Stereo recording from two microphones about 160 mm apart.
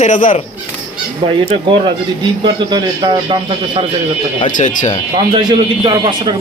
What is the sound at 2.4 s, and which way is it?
A man's voice, 25° right (ahead or behind).